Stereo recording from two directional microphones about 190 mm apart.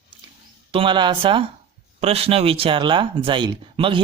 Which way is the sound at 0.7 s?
25° right (ahead or behind).